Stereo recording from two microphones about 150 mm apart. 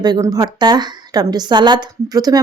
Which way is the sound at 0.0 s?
25° right (ahead or behind).